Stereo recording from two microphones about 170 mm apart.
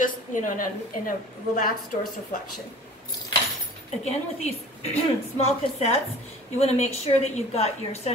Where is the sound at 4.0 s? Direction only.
35° left (ahead or behind).